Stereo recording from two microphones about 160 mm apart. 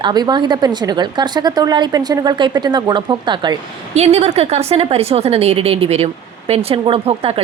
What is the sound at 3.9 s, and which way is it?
A woman's voice, 45° right (ahead or behind).